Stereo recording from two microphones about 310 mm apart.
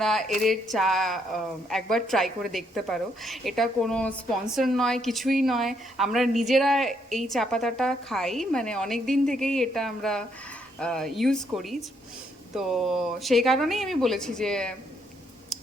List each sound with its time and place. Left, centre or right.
0.0 s speech: centre